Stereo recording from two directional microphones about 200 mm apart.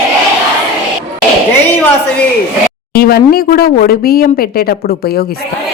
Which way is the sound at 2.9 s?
50° left (ahead or behind).